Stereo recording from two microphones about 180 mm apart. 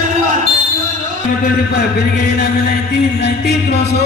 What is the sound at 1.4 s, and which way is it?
A man's voice, 60° left (ahead or behind).